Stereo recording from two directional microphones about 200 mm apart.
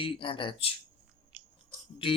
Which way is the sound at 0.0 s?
25° left (ahead or behind).